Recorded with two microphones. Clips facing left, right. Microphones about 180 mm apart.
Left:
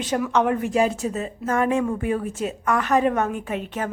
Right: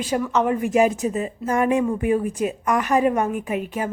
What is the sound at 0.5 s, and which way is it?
Speech, 10° right (ahead or behind).